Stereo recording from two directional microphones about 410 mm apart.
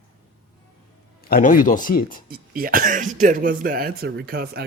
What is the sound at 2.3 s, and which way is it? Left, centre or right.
Speech, right.